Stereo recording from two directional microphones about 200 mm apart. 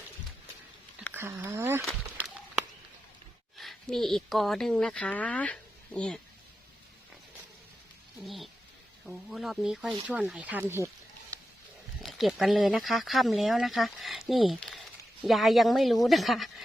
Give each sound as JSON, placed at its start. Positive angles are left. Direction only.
{"t": 1.1, "sound": "a sound", "side_deg": -10}
{"t": 3.6, "sound": "speech", "side_deg": 0}
{"t": 8.2, "sound": "speech", "side_deg": 0}
{"t": 12.0, "sound": "speech", "side_deg": 0}